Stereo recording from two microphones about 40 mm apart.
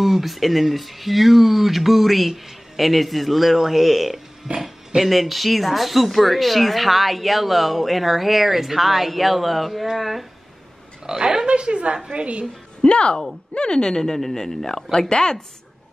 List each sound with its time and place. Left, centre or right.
0.0 s speech: centre
11.1 s speech: centre
12.8 s a woman's voice: left